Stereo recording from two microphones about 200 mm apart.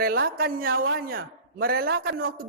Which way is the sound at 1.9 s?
75° right (ahead or behind).